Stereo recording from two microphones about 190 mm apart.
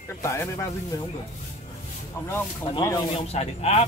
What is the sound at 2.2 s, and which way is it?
Speech, 20° left (ahead or behind).